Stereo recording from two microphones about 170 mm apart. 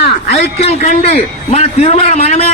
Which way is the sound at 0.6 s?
40° left (ahead or behind).